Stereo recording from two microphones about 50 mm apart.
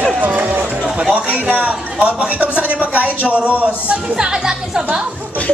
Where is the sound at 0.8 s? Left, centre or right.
Right.